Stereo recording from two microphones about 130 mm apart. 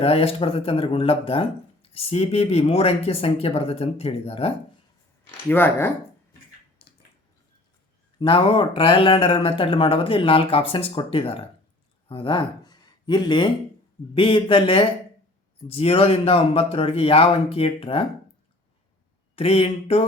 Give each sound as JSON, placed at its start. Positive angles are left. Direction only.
{"t": 0.0, "sound": "speech", "side_deg": 50}
{"t": 5.5, "sound": "speech", "side_deg": 15}
{"t": 8.2, "sound": "speech", "side_deg": 40}
{"t": 19.4, "sound": "speech", "side_deg": 50}